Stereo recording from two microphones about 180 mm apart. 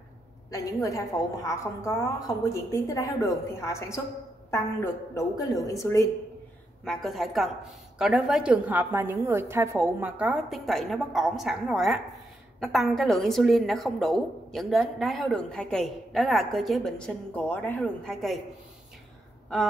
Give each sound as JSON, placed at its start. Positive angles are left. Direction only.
{"t": 0.5, "sound": "a woman's voice", "side_deg": 20}
{"t": 6.8, "sound": "a woman's voice", "side_deg": 0}